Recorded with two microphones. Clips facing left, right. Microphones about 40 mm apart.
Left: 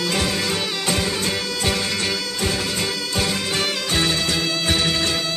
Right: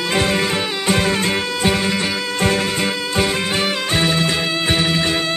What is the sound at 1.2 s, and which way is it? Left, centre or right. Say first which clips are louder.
Music: right 5 dB; right.